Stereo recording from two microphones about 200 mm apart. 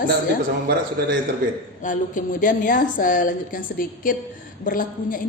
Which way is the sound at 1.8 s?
40° left (ahead or behind).